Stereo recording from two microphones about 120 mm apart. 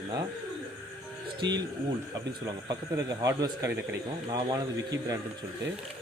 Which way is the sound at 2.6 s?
30° right (ahead or behind).